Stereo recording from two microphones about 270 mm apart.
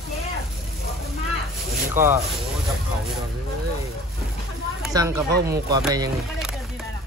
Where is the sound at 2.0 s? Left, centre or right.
Right.